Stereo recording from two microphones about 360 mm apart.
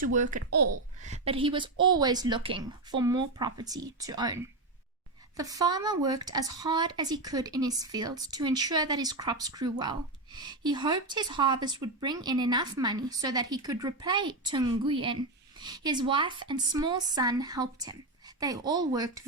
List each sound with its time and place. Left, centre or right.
0.0 s a child's voice: right
5.4 s speech: centre